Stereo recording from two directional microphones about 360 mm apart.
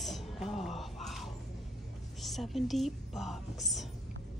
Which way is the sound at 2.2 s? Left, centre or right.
Centre.